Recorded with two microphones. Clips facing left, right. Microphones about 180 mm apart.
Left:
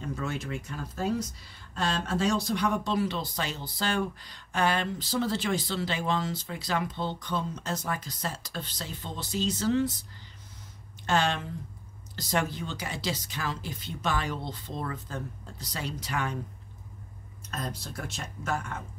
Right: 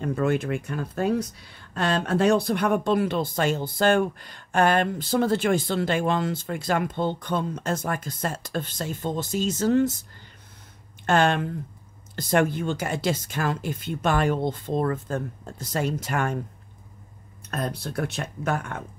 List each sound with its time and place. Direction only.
0.0 s speech: 55° right (ahead or behind)
11.1 s speech: 55° right (ahead or behind)
17.5 s speech: 60° right (ahead or behind)